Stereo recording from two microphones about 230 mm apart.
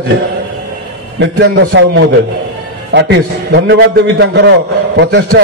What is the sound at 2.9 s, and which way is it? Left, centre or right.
A man's voice, right.